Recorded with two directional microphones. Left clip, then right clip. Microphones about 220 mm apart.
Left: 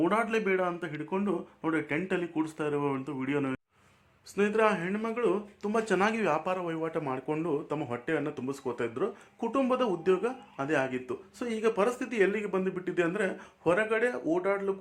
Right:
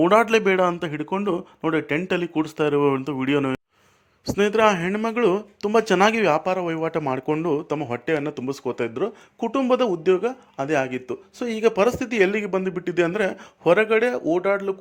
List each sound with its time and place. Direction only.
0.0 s speech: 40° right (ahead or behind)